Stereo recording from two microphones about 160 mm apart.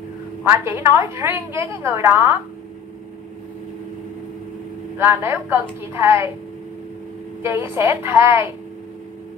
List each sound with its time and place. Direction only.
0.5 s a woman's voice: 15° right (ahead or behind)
4.9 s a woman's voice: 15° right (ahead or behind)
7.4 s a woman's voice: 15° right (ahead or behind)